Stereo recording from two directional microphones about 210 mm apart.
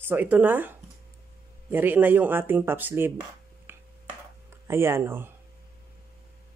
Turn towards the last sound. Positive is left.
turn(degrees=-10)  # may be behind; listen again after turning